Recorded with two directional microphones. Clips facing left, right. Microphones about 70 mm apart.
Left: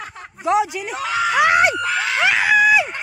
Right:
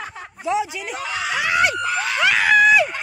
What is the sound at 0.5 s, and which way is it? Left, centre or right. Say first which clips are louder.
Speech: left 4 dB; left.